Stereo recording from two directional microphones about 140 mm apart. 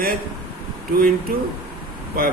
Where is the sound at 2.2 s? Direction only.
90° right.